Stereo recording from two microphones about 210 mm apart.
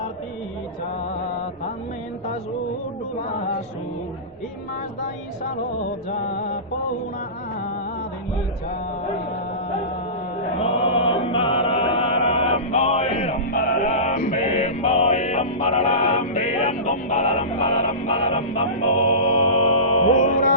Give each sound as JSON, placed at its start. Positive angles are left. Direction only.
{"t": 6.1, "sound": "music", "side_deg": 40}
{"t": 10.6, "sound": "chant", "side_deg": 25}
{"t": 13.5, "sound": "music", "side_deg": 45}